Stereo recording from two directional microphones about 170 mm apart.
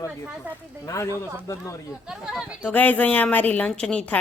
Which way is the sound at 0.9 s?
20° left (ahead or behind).